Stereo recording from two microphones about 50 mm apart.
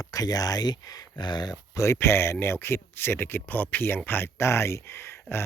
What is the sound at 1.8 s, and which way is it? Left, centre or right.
Speech, left.